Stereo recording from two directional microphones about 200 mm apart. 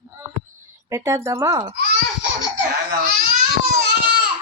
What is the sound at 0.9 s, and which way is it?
Speech, 15° right (ahead or behind).